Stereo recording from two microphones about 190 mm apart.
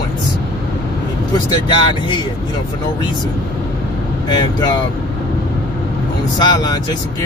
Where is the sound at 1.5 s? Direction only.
25° left (ahead or behind).